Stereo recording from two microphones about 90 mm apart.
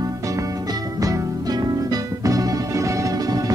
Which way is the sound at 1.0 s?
45° right (ahead or behind).